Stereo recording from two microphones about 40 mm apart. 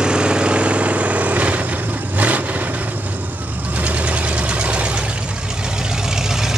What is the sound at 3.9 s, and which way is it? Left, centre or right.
Vehicle, right.